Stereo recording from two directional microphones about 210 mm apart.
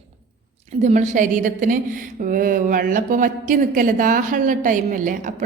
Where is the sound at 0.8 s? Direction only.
35° right (ahead or behind).